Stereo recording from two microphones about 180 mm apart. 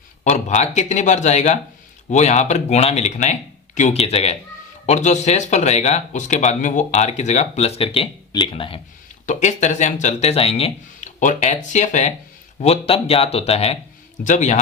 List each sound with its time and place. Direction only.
0.3 s speech: 40° left (ahead or behind)
9.2 s speech: 40° left (ahead or behind)